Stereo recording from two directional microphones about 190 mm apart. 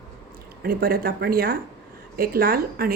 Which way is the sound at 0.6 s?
50° right (ahead or behind).